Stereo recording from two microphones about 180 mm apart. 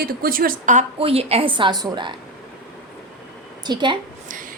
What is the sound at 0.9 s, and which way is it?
A woman's voice, 30° right (ahead or behind).